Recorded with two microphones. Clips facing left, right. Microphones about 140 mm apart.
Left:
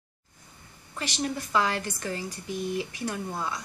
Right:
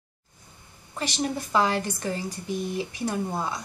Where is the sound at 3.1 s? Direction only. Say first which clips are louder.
Right 4 dB; 25° right (ahead or behind).